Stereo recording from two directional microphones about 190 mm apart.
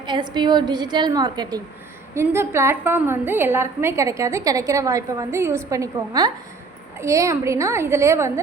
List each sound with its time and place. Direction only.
0.0 s a woman's voice: 25° right (ahead or behind)